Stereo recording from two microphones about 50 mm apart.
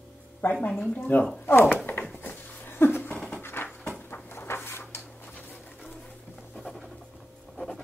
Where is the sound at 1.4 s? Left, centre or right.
Left.